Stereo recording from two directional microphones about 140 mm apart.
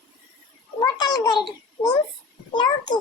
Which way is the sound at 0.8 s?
30° left (ahead or behind).